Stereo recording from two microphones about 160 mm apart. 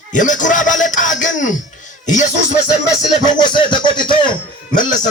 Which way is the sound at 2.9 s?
25° left (ahead or behind).